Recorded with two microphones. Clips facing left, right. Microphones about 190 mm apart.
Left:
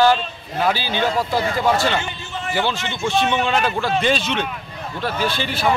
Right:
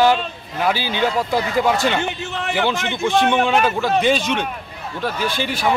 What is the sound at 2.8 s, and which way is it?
Speech, 55° right (ahead or behind).